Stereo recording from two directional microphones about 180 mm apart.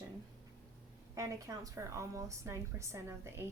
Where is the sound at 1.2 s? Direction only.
20° right (ahead or behind).